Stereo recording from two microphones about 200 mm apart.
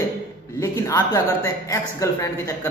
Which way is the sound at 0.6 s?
15° left (ahead or behind).